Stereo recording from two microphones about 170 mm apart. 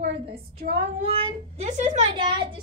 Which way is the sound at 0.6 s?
70° right (ahead or behind).